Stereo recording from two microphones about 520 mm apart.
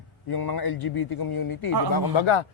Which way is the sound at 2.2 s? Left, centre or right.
Left.